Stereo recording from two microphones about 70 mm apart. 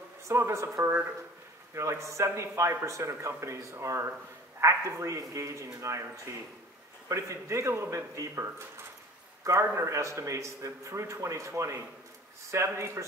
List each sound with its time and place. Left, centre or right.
0.3 s a man's voice: right
9.4 s a man's voice: right